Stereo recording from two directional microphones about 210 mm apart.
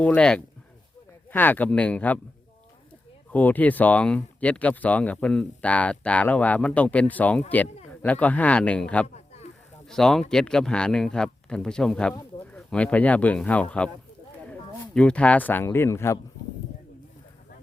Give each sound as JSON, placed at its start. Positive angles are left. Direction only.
{"t": 0.0, "sound": "speech", "side_deg": 5}
{"t": 3.3, "sound": "speech", "side_deg": 10}
{"t": 9.1, "sound": "snake", "side_deg": 30}
{"t": 9.8, "sound": "speech", "side_deg": 0}
{"t": 14.9, "sound": "speech", "side_deg": 5}